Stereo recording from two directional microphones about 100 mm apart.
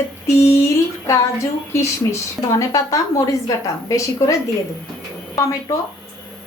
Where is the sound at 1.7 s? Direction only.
30° left (ahead or behind).